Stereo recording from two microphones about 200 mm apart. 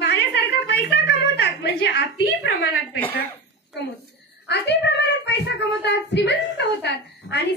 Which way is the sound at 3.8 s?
60° left (ahead or behind).